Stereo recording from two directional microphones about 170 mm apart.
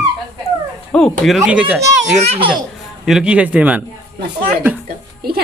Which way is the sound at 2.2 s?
35° right (ahead or behind).